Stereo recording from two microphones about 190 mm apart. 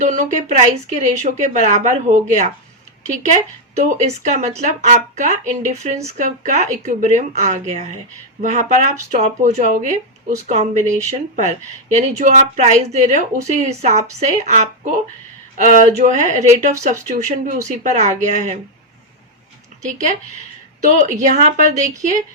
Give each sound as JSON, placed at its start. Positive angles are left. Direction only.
{"t": 0.0, "sound": "speech", "side_deg": -40}
{"t": 3.8, "sound": "speech", "side_deg": -35}
{"t": 19.8, "sound": "speech", "side_deg": -40}
{"t": 21.8, "sound": "a woman's voice", "side_deg": -15}